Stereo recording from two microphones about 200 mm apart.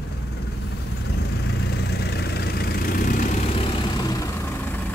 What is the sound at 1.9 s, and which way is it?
Vehicle, 55° left (ahead or behind).